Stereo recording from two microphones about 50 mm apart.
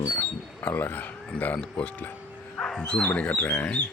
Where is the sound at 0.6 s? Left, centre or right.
Left.